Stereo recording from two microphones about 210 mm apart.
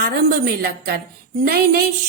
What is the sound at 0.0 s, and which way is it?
A woman's voice, 45° right (ahead or behind).